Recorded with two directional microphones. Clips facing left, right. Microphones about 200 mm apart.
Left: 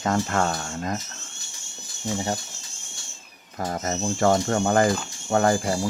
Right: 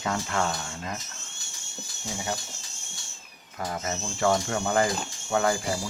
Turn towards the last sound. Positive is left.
turn(degrees=45)  # may be behind; listen again after turning